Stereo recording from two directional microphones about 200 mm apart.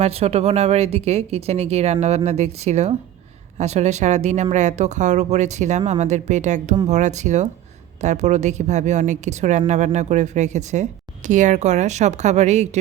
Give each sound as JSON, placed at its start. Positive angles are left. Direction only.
{"t": 0.0, "sound": "a woman's voice", "side_deg": -30}